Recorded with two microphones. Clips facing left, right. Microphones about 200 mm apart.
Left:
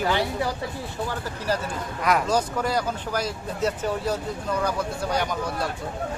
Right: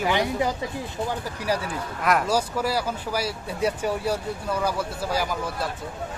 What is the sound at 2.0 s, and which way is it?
Speech, centre (ahead or behind).